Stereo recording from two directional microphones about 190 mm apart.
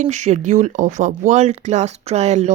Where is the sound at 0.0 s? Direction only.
35° right (ahead or behind).